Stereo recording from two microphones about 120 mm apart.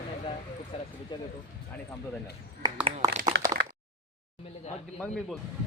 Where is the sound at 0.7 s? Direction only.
55° left (ahead or behind).